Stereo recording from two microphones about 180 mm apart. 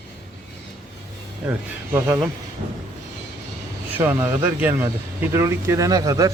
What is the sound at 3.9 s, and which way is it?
Speech, 10° right (ahead or behind).